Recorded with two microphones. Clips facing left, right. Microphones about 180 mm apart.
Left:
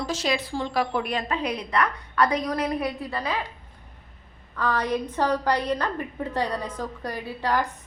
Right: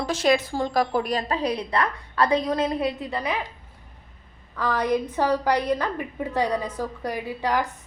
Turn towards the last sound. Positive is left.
turn(degrees=-10)  # may be behind; listen again after turning